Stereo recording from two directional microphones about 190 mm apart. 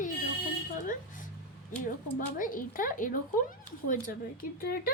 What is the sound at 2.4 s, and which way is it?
Speech, 45° left (ahead or behind).